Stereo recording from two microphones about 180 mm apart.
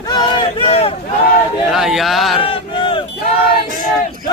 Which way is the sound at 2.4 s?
30° left (ahead or behind).